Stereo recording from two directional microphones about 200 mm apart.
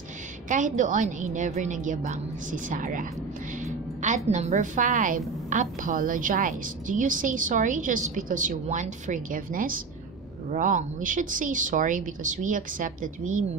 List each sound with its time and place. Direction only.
0.5 s a woman's voice: 40° right (ahead or behind)
4.3 s a woman's voice: 35° right (ahead or behind)